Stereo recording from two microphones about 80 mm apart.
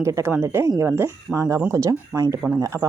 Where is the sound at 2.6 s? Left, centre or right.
Right.